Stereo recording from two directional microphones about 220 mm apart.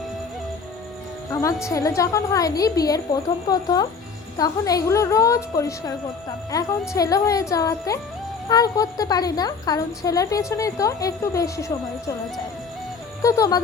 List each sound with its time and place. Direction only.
1.3 s music: 15° left (ahead or behind)
1.6 s a woman's voice: 15° left (ahead or behind)
13.2 s a woman's voice: 15° left (ahead or behind)